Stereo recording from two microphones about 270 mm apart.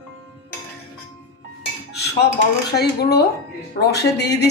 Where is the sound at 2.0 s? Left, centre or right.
Left.